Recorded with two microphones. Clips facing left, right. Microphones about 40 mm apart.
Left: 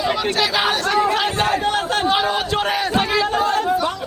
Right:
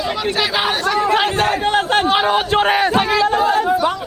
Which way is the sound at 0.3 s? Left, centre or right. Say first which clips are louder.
Right 3 dB; centre.